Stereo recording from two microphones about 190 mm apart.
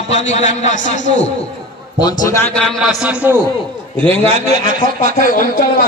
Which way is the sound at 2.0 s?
20° left (ahead or behind).